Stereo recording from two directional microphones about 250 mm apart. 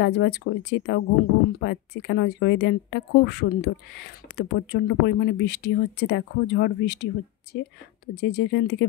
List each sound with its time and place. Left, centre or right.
0.0 s a woman's voice: left
8.1 s speech: left